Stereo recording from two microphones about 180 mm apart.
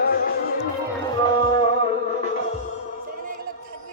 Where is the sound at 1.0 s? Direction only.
25° left (ahead or behind).